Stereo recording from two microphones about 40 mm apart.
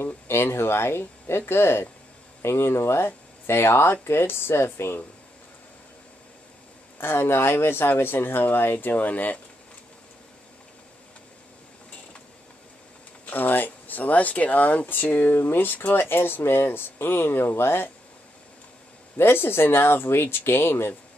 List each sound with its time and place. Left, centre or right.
0.0 s speech: left
7.0 s speech: left
13.3 s speech: left
14.9 s speech: left
19.1 s speech: left